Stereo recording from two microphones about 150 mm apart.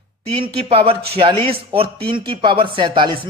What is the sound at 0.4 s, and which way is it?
A woman's voice, 40° right (ahead or behind).